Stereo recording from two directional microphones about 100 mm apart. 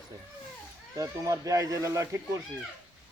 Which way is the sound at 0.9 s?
35° right (ahead or behind).